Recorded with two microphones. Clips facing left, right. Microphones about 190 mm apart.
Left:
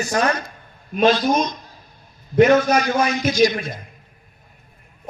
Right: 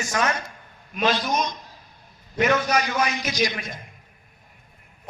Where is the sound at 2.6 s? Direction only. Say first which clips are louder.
Left 5 dB; 50° left (ahead or behind).